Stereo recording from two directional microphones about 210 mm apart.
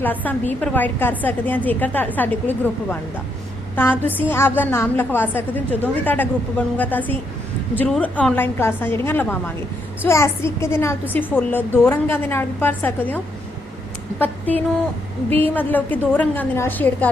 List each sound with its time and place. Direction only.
0.0 s a woman's voice: 10° left (ahead or behind)
15.3 s a woman's voice: 25° right (ahead or behind)
15.5 s a woman's voice: 10° left (ahead or behind)